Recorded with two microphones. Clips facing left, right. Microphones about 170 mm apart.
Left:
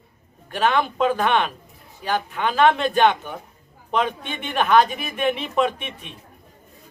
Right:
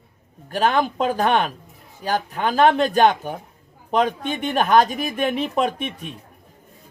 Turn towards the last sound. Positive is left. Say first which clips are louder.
# right 1 dB
turn(degrees=-40)  # may be behind; listen again after turning